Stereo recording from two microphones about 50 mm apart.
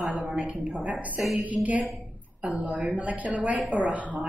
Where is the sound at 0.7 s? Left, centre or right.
Right.